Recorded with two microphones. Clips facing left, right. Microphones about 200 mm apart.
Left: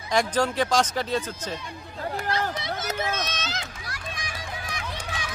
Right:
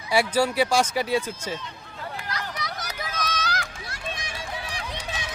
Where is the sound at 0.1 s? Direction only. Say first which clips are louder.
Right 1 dB; 10° right (ahead or behind).